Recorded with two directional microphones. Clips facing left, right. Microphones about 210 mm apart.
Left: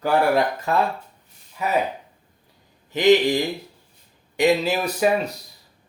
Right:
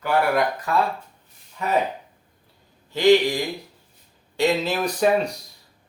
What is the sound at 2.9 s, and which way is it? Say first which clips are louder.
Speech: even; 20° left (ahead or behind).